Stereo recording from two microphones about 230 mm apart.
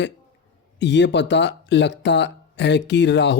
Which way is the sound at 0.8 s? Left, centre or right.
Left.